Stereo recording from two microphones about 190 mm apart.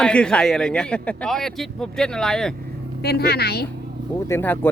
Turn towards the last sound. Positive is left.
turn(degrees=10)  # may be behind; listen again after turning